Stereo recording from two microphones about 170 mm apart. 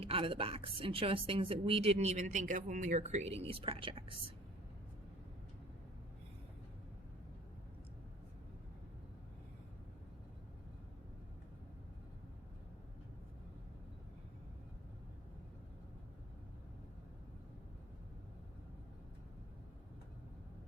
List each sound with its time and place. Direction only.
0.0 s a woman's voice: 35° right (ahead or behind)